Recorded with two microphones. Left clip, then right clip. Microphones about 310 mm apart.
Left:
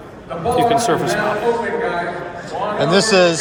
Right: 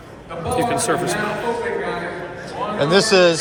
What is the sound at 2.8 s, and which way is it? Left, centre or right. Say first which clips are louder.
Speech: left 1 dB; centre.